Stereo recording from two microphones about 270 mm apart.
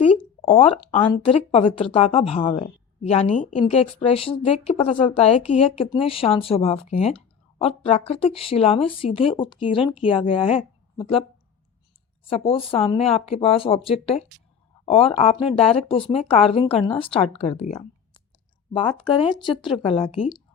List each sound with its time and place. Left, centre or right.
0.2 s speech: left
12.3 s speech: centre